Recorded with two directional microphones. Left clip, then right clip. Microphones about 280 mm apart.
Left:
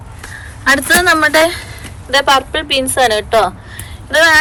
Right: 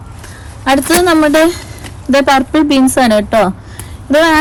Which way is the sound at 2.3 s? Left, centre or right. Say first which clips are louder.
Right 2 dB; right.